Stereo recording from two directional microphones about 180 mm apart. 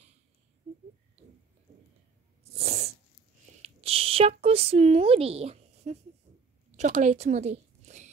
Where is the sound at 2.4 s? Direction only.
35° right (ahead or behind).